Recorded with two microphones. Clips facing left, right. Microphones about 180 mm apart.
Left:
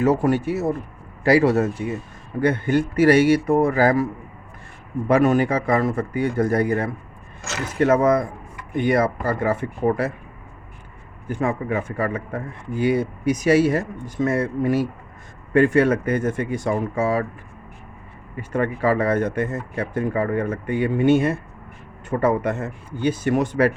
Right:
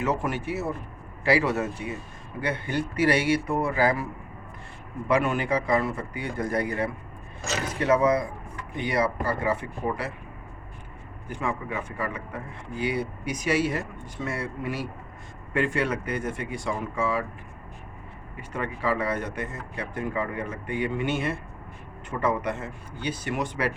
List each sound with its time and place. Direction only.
0.0 s speech: 40° left (ahead or behind)
11.3 s speech: 45° left (ahead or behind)
18.3 s speech: 45° left (ahead or behind)